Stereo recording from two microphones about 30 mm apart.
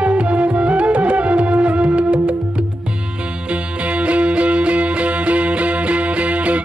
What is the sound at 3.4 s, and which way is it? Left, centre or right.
Music, right.